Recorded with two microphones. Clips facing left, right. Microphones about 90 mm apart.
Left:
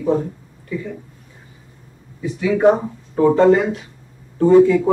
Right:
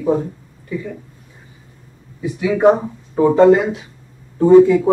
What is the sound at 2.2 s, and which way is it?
A woman's voice, 10° right (ahead or behind).